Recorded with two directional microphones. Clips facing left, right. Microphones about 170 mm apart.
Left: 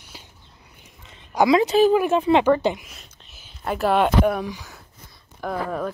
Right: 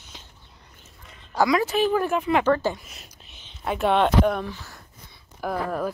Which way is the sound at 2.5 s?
15° left (ahead or behind).